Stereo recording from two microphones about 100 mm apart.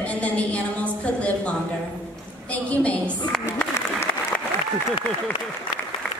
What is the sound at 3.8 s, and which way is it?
Applause, 25° left (ahead or behind).